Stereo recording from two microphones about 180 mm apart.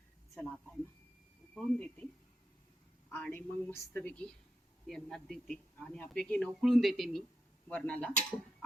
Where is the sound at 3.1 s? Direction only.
10° left (ahead or behind).